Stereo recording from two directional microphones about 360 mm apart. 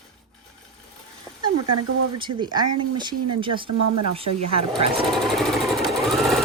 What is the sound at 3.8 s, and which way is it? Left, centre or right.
Speech, right.